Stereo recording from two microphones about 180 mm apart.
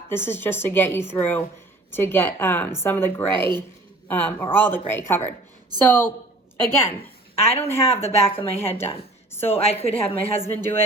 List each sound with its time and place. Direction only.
0.1 s speech: 10° left (ahead or behind)
7.3 s a woman's voice: 35° left (ahead or behind)
9.3 s speech: 10° left (ahead or behind)
9.6 s a woman's voice: 35° left (ahead or behind)
10.4 s speech: 10° left (ahead or behind)